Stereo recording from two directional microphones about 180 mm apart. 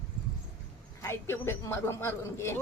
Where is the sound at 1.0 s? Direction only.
15° left (ahead or behind).